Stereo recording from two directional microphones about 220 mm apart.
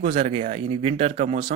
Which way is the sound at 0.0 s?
30° right (ahead or behind).